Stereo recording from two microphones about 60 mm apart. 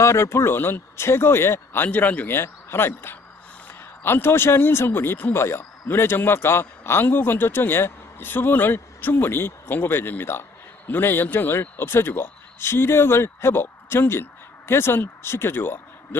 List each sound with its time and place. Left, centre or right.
0.0 s speech: left
1.9 s a man's voice: left
2.3 s speech: left